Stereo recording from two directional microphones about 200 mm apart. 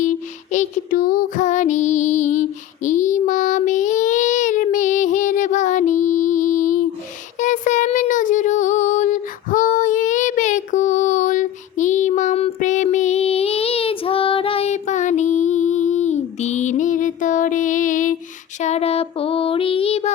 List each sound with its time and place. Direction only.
0.0 s music: 40° left (ahead or behind)
7.3 s child singing: 40° left (ahead or behind)